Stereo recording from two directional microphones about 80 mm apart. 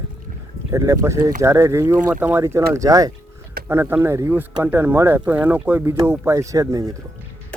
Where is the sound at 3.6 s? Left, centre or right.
Right.